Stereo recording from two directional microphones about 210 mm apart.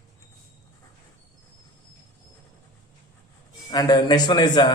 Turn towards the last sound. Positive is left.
turn(degrees=20)  # may be behind; listen again after turning